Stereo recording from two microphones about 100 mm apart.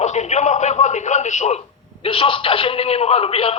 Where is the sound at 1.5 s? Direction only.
85° left.